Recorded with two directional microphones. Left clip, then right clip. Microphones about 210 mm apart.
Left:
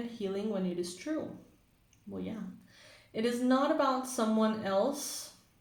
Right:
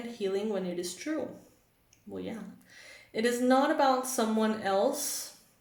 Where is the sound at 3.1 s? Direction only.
30° right (ahead or behind).